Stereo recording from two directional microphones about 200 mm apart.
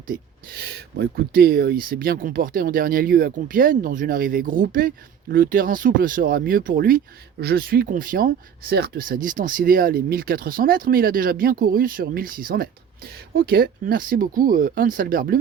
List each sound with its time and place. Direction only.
0.1 s speech: 45° right (ahead or behind)